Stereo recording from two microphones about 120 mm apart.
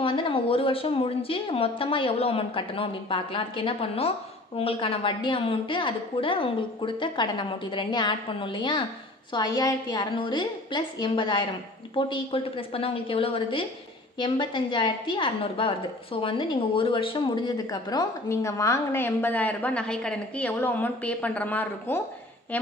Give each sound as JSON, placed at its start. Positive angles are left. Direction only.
{"t": 0.0, "sound": "a woman's voice", "side_deg": 45}
{"t": 11.9, "sound": "a woman's voice", "side_deg": 50}